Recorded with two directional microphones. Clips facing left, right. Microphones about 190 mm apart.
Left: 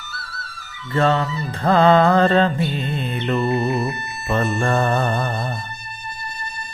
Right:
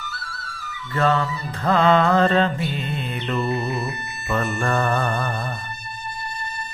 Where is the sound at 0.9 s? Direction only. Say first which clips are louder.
Left 2 dB; 25° left (ahead or behind).